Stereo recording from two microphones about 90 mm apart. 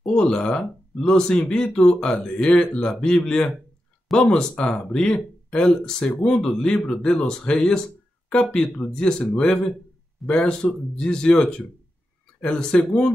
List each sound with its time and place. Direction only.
0.0 s speech: 10° left (ahead or behind)
6.1 s speech: 20° left (ahead or behind)
6.4 s speech: 10° left (ahead or behind)